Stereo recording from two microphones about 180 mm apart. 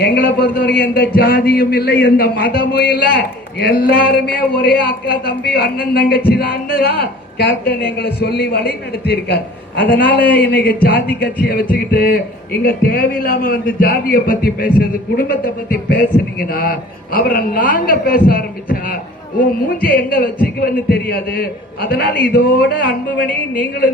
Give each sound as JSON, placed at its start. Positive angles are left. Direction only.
{"t": 0.0, "sound": "a man's voice", "side_deg": 60}
{"t": 9.9, "sound": "a man's voice", "side_deg": 10}
{"t": 10.4, "sound": "a man's voice", "side_deg": 55}